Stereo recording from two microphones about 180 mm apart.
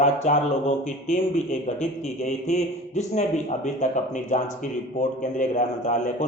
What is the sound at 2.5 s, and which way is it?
A man's voice, 40° left (ahead or behind).